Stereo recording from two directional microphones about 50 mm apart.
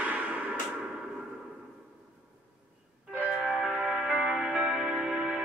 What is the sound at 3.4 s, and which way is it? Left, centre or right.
Music, centre.